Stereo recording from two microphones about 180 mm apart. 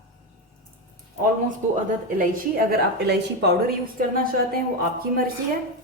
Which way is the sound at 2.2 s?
50° right (ahead or behind).